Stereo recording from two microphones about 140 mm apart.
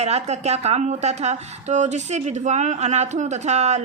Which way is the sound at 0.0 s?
50° right (ahead or behind).